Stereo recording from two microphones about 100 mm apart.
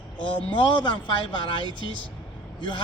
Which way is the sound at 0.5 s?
55° left (ahead or behind).